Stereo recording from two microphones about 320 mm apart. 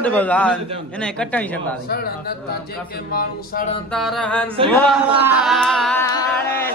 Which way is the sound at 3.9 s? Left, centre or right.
Centre.